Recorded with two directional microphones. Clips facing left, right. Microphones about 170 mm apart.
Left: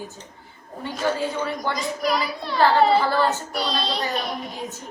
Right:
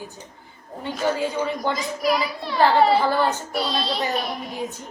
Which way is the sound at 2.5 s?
15° right (ahead or behind).